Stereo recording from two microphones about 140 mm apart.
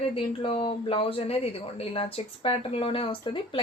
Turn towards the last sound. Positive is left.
turn(degrees=40)  # may be behind; listen again after turning